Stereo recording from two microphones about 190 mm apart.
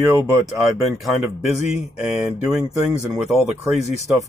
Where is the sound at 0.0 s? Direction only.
Centre (ahead or behind).